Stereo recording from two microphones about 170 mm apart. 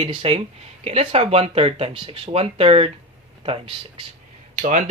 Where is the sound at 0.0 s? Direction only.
30° right (ahead or behind).